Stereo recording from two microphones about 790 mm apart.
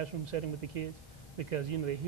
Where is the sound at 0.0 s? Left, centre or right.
Right.